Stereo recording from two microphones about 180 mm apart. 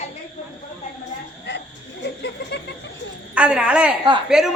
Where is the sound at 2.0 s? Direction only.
70° left (ahead or behind).